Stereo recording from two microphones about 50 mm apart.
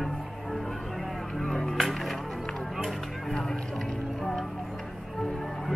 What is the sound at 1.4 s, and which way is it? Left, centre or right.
Music, centre.